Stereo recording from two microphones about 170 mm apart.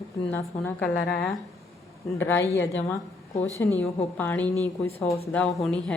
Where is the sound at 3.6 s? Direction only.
15° left (ahead or behind).